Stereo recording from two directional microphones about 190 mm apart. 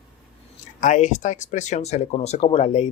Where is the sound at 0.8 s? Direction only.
40° left (ahead or behind).